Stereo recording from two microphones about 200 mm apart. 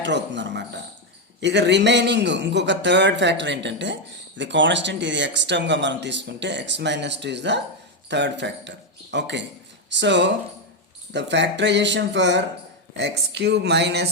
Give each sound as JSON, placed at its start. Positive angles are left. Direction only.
{"t": 0.0, "sound": "speech", "side_deg": -60}